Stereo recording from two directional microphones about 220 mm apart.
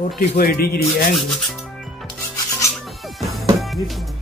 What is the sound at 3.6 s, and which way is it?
Music, centre (ahead or behind).